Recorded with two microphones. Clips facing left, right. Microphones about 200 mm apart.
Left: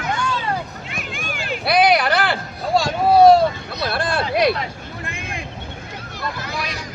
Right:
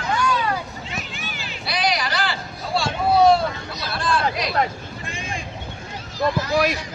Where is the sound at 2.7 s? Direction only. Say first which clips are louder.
Left 4 dB; 40° left (ahead or behind).